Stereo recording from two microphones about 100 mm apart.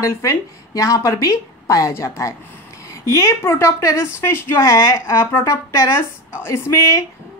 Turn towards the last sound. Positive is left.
turn(degrees=30)  # may be behind; listen again after turning